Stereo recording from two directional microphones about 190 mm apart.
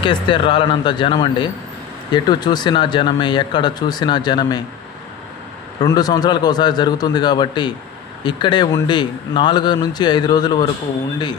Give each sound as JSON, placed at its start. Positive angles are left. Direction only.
{"t": 0.0, "sound": "speech", "side_deg": 25}
{"t": 5.8, "sound": "speech", "side_deg": 20}